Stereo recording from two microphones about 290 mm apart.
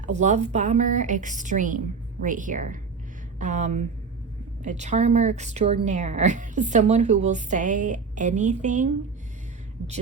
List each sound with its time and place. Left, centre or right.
0.0 s speech: right